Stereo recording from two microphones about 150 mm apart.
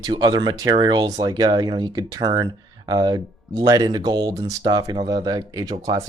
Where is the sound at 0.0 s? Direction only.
30° right (ahead or behind).